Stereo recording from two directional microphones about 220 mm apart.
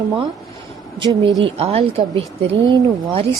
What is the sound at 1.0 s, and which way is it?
Speech, 20° right (ahead or behind).